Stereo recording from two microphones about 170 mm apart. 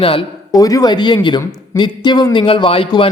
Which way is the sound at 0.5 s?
20° left (ahead or behind).